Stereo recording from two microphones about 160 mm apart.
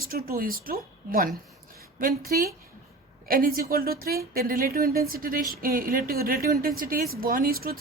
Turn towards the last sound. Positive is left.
turn(degrees=-65)  # may be behind; listen again after turning